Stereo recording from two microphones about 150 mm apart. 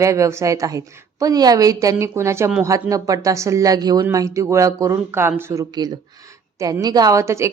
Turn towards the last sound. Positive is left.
turn(degrees=-20)  # may be behind; listen again after turning